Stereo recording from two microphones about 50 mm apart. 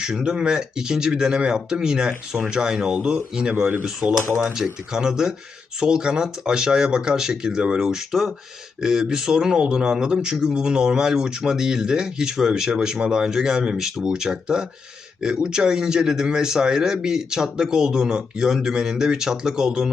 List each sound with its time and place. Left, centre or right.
0.0 s speech: centre
3.5 s speech: right
4.5 s speech: centre